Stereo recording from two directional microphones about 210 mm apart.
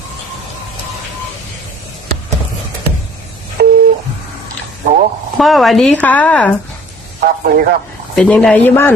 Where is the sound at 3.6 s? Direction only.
50° right (ahead or behind).